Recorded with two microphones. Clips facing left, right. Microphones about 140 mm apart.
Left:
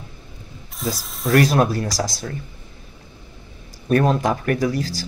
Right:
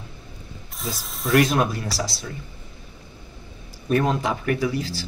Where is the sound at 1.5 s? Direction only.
40° left (ahead or behind).